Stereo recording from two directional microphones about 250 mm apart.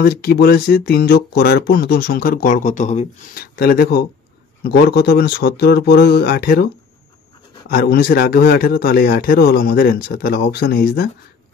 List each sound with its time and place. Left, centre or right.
0.0 s speech: left
7.7 s speech: left